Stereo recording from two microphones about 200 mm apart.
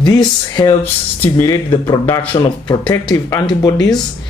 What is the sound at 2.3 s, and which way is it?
Speech, 25° left (ahead or behind).